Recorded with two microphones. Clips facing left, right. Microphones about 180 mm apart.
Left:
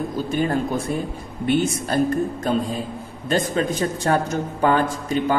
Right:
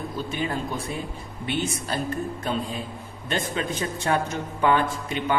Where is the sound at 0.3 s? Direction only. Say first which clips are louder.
Left 8 dB; 45° left (ahead or behind).